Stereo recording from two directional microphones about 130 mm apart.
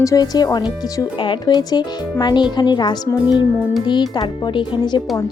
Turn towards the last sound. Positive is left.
turn(degrees=35)  # may be behind; listen again after turning